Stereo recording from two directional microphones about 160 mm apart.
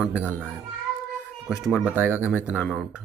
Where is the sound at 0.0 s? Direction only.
10° right (ahead or behind).